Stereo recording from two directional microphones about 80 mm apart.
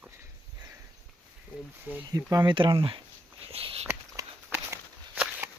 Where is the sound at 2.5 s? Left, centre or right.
Right.